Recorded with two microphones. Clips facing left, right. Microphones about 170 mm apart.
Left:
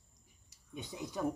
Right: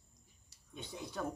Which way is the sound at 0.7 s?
15° left (ahead or behind).